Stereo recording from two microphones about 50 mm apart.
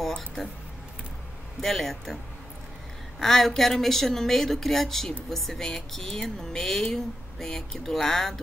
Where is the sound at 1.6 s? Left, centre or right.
Centre.